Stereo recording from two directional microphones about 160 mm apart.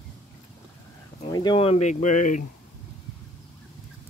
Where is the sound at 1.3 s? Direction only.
30° left (ahead or behind); by 2.4 s 50° left (ahead or behind).